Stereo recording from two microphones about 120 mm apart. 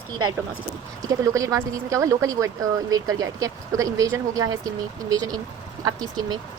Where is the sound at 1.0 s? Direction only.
25° right (ahead or behind).